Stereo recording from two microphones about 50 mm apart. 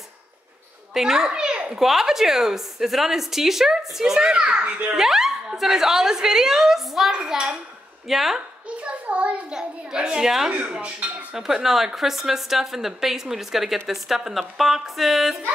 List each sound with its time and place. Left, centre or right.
0.9 s children playing: centre
1.8 s a woman's voice: centre
4.9 s a woman's voice: centre
7.2 s a woman's voice: centre
8.1 s a woman's voice: centre
8.6 s hands: right
9.5 s a woman's voice: centre
10.6 s speech: right
11.3 s a woman's voice: centre